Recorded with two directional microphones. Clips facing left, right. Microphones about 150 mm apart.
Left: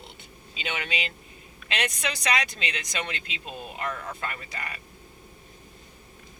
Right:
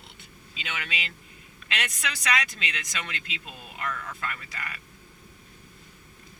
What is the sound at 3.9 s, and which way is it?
Speech, 25° left (ahead or behind).